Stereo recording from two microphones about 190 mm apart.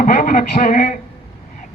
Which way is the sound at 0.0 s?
45° left (ahead or behind).